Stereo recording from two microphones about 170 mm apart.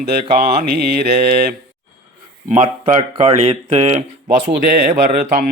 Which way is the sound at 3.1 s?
35° right (ahead or behind).